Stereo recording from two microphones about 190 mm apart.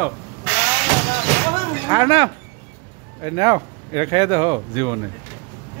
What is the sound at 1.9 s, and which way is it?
Speech, 20° right (ahead or behind).